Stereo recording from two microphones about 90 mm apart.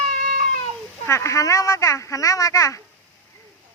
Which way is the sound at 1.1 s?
30° left (ahead or behind).